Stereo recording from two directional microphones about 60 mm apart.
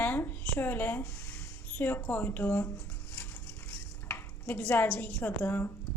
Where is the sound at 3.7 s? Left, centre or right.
Left.